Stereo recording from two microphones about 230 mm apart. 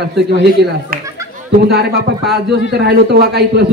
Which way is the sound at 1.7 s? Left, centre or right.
Right.